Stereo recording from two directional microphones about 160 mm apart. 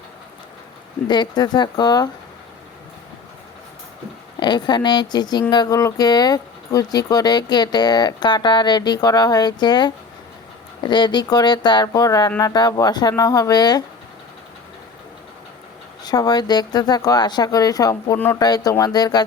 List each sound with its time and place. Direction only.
1.0 s speech: 25° left (ahead or behind)
4.4 s speech: 25° left (ahead or behind)
16.0 s speech: 25° left (ahead or behind)